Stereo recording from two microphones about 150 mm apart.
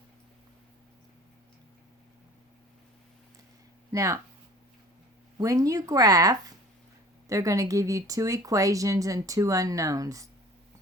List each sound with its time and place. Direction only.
3.9 s speech: 20° right (ahead or behind)
5.4 s speech: 20° right (ahead or behind)